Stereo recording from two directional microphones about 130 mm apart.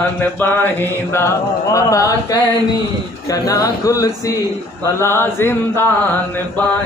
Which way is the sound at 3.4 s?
25° left (ahead or behind).